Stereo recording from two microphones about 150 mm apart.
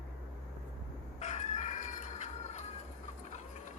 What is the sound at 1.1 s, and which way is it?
Chicken, 50° left (ahead or behind).